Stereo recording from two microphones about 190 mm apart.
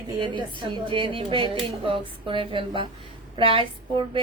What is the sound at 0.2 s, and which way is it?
A woman's voice, 25° right (ahead or behind).